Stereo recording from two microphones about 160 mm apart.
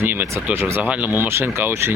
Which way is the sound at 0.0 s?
15° right (ahead or behind).